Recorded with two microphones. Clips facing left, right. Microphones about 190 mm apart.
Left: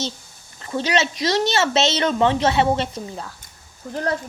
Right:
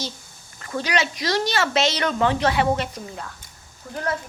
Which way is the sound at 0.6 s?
25° left (ahead or behind).